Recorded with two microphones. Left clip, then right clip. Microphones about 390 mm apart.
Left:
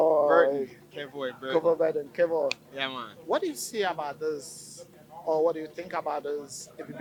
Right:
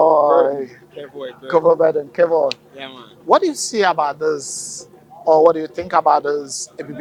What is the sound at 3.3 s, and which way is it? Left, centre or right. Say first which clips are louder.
A man's voice: right 14 dB; right.